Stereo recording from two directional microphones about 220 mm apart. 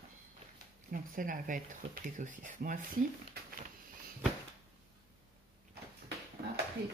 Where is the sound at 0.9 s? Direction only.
40° right (ahead or behind).